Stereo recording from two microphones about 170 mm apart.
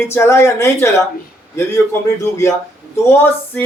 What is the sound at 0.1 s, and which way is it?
Speech, 15° left (ahead or behind).